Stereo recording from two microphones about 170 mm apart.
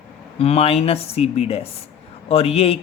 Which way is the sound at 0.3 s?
35° left (ahead or behind).